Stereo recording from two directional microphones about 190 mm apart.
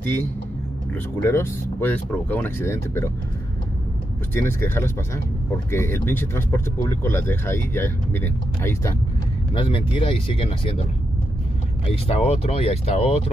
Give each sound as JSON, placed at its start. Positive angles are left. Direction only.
{"t": 1.2, "sound": "speech", "side_deg": 10}
{"t": 4.3, "sound": "speech", "side_deg": 15}
{"t": 9.5, "sound": "speech", "side_deg": 25}